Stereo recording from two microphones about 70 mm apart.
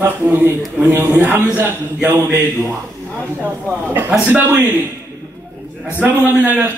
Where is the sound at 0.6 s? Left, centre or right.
Centre.